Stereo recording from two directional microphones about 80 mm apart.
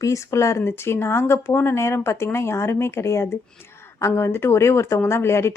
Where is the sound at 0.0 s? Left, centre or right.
Left.